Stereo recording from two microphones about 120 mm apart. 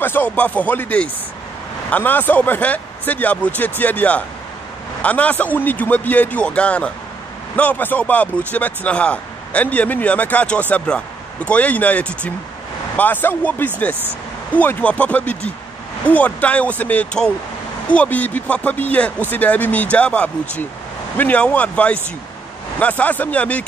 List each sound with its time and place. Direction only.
0.0 s speech: 15° left (ahead or behind)